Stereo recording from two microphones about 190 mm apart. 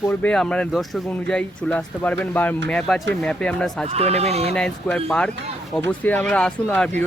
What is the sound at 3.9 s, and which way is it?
Speech, 35° right (ahead or behind).